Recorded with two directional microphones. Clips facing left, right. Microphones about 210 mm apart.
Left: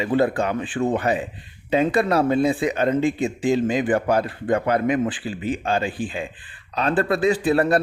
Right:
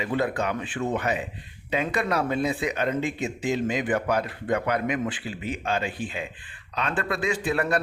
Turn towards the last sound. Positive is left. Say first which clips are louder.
# left 7 dB
turn(degrees=35)  # may be behind; listen again after turning